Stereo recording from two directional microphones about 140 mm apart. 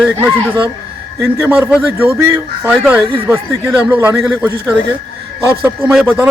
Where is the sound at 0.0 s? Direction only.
15° right (ahead or behind).